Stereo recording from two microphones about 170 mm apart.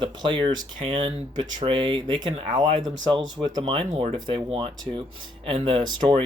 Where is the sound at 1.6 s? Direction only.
30° right (ahead or behind).